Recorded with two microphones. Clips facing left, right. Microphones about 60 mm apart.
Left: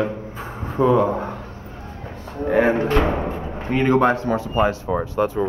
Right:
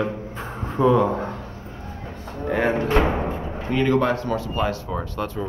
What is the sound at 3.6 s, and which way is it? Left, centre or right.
Speech, left.